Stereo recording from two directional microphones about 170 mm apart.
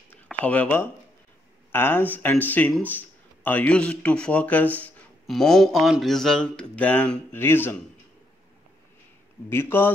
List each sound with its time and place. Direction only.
0.1 s a sound: 10° left (ahead or behind)
1.7 s speech: 10° left (ahead or behind)
9.5 s speech: 15° left (ahead or behind)